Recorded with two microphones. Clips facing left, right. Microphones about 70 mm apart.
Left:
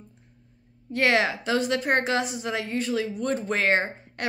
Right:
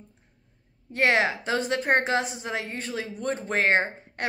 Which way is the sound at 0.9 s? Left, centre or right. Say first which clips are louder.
Even; right.